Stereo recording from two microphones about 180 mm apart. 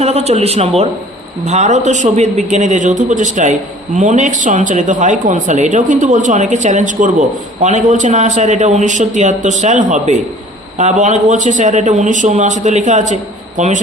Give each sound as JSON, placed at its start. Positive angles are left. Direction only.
{"t": 0.0, "sound": "a man's voice", "side_deg": -35}